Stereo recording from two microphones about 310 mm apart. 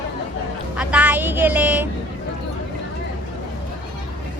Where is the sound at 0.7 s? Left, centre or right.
Centre.